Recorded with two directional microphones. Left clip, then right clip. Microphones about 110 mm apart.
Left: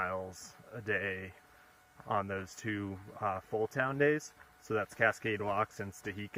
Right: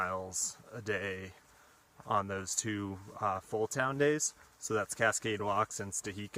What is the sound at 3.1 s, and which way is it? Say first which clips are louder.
Speech: right 1 dB; 30° right (ahead or behind).